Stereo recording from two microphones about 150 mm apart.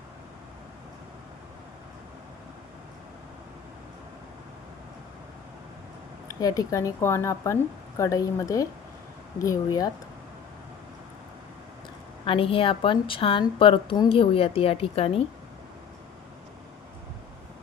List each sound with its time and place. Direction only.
6.2 s speech: 25° left (ahead or behind)
12.2 s a woman's voice: 35° left (ahead or behind)